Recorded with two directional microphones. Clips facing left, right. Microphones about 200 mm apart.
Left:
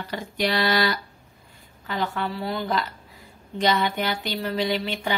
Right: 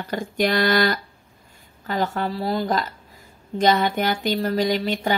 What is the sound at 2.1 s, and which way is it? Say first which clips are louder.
Speech: right 4 dB; 40° right (ahead or behind).